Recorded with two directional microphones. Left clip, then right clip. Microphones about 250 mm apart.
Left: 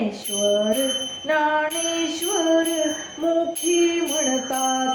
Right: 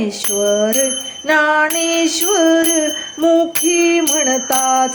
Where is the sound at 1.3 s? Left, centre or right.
Right.